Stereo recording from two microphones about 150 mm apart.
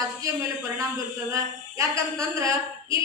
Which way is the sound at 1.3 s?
20° right (ahead or behind).